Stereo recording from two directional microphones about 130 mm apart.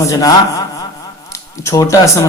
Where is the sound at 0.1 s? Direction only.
25° left (ahead or behind).